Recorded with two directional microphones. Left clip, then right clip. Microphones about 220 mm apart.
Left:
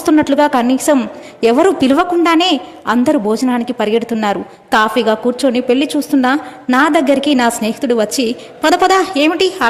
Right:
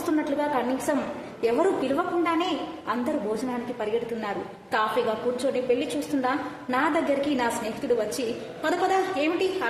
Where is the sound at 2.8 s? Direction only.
45° left (ahead or behind).